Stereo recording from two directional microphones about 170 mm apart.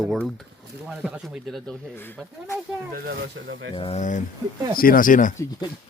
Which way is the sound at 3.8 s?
35° left (ahead or behind).